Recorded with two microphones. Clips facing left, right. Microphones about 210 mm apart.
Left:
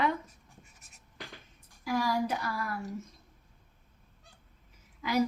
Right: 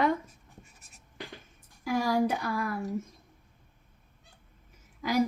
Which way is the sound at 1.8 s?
50° right (ahead or behind).